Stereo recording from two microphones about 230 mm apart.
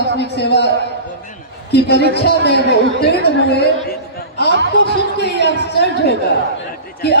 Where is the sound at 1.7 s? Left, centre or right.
Left.